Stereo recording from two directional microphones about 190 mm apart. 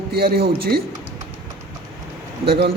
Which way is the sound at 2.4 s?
55° right (ahead or behind).